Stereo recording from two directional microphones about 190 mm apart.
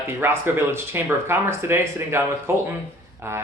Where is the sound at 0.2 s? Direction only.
10° right (ahead or behind).